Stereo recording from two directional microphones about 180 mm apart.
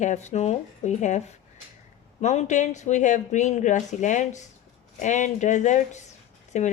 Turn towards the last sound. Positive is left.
turn(degrees=40)  # may be behind; listen again after turning